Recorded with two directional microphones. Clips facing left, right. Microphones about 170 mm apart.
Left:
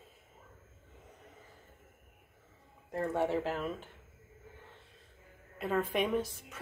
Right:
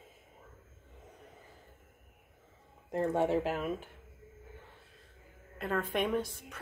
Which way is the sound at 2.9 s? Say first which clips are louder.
Right 2 dB; 20° right (ahead or behind).